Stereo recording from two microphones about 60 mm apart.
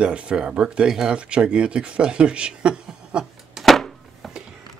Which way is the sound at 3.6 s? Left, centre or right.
Centre.